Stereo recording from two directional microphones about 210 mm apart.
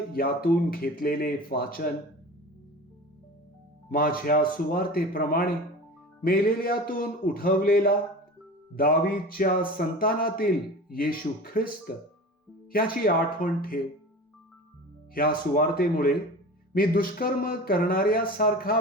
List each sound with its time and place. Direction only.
0.1 s a man's voice: 45° left (ahead or behind)
3.9 s a man's voice: 45° left (ahead or behind)
15.1 s a man's voice: 45° left (ahead or behind)